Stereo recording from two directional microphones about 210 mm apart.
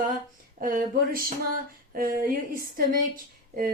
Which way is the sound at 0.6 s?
40° right (ahead or behind).